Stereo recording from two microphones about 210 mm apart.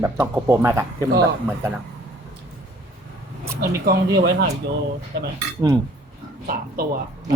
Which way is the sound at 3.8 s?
45° right (ahead or behind).